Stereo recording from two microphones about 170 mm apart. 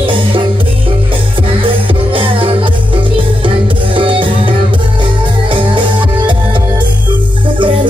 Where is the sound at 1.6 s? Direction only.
30° right (ahead or behind).